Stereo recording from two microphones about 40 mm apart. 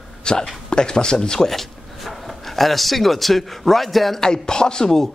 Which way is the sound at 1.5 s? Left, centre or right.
Centre.